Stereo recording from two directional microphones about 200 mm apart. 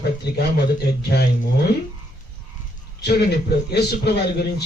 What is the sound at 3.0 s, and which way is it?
A man's voice, 55° left (ahead or behind).